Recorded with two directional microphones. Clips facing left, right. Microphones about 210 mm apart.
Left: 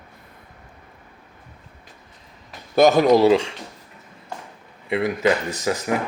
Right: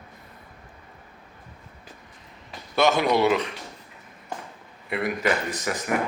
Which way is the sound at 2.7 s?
40° left (ahead or behind).